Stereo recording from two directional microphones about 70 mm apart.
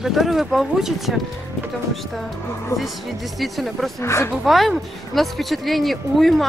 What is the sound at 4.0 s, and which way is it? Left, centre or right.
Speech, left.